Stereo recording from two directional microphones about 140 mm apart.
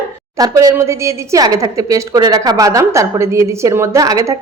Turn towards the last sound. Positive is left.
turn(degrees=-25)  # may be behind; listen again after turning